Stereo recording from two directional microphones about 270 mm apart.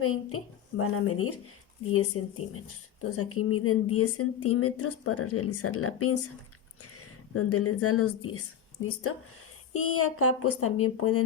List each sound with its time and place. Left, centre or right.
0.0 s speech: left